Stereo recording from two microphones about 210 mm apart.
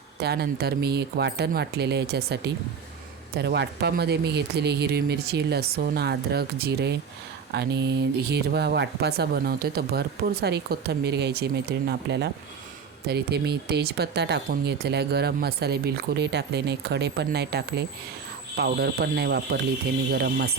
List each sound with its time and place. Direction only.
0.2 s speech: 50° right (ahead or behind)